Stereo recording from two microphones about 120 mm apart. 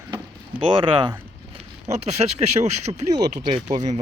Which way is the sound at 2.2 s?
55° right (ahead or behind).